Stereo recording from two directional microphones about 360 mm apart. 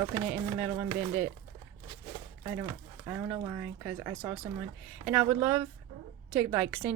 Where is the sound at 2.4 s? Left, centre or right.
Centre.